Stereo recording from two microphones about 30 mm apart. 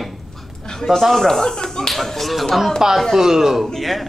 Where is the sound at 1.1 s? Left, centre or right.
Centre.